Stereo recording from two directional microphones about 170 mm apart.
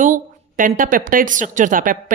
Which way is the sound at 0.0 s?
50° right (ahead or behind).